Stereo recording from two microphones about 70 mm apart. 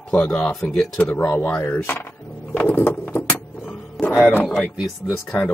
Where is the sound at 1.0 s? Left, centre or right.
Left.